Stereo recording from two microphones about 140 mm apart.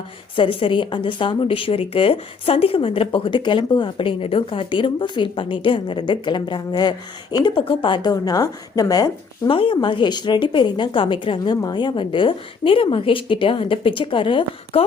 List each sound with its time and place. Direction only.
0.3 s speech: 40° left (ahead or behind)
9.5 s speech: 35° left (ahead or behind)